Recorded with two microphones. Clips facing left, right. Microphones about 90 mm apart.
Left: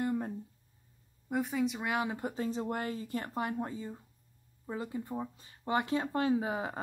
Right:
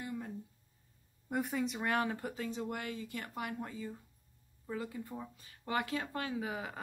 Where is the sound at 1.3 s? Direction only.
Centre (ahead or behind).